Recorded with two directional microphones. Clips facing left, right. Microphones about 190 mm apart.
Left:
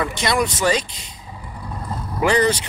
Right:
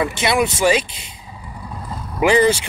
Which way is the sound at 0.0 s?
5° right (ahead or behind).